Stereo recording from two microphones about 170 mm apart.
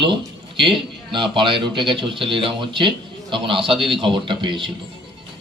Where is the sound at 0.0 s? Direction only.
30° right (ahead or behind).